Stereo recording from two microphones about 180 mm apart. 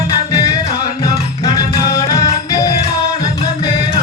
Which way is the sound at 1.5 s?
20° left (ahead or behind).